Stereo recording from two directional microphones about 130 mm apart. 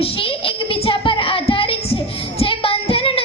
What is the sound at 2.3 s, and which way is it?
Child singing, 45° left (ahead or behind).